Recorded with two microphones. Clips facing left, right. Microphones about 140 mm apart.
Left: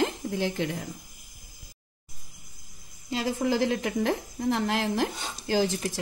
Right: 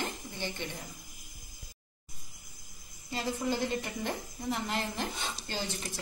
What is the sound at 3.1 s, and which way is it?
A woman's voice, 90° left.